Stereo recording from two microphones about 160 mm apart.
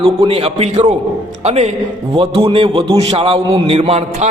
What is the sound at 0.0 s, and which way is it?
A man's voice, 35° right (ahead or behind).